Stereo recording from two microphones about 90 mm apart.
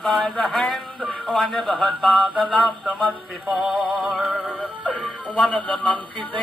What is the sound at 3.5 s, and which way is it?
Synthetic singing, 5° right (ahead or behind).